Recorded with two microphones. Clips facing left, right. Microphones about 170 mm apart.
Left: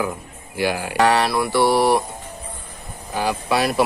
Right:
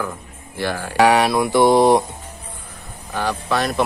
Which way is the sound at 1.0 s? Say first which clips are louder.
Right 3 dB; 10° right (ahead or behind).